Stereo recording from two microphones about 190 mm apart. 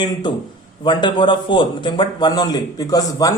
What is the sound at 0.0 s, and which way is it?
A man's voice, 25° left (ahead or behind).